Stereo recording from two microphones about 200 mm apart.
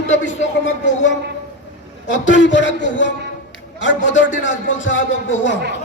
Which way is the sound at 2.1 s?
65° left (ahead or behind).